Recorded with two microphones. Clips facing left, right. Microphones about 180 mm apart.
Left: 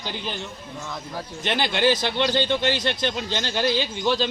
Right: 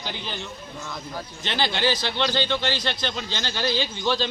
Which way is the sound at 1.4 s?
50° left (ahead or behind).